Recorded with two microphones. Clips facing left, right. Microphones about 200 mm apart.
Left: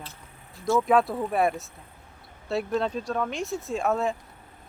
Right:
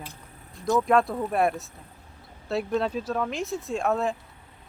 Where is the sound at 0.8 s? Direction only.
Centre (ahead or behind).